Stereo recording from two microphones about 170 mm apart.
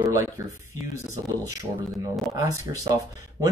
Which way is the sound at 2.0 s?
20° right (ahead or behind).